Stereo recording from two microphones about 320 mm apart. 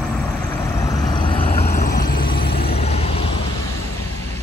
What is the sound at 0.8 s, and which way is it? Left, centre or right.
Vehicle, centre.